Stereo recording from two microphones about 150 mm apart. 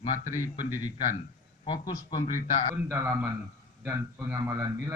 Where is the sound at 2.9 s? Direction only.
15° right (ahead or behind).